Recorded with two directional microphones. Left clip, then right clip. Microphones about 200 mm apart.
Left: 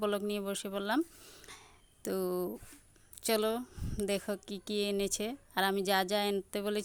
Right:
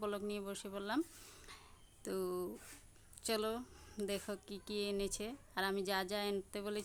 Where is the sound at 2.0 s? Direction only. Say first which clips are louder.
Left 6 dB; 35° left (ahead or behind).